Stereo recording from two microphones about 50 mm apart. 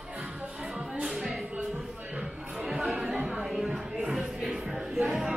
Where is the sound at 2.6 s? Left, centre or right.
Centre.